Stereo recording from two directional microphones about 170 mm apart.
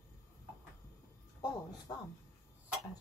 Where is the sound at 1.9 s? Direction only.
25° left (ahead or behind).